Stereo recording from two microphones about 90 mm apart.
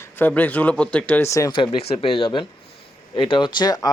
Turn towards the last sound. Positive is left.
turn(degrees=50)  # may be behind; listen again after turning